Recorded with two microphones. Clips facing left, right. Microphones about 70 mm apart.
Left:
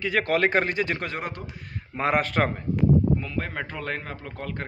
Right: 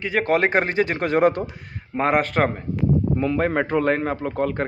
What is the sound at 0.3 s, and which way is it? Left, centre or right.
Speech, right.